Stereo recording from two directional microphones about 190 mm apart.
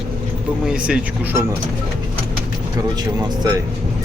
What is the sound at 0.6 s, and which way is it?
Speech, 5° right (ahead or behind).